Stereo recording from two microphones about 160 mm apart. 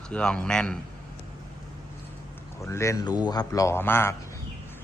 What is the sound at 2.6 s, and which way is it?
Speech, 20° left (ahead or behind).